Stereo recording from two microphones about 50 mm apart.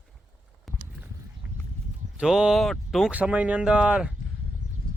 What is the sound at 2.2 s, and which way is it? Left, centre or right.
Speech, centre.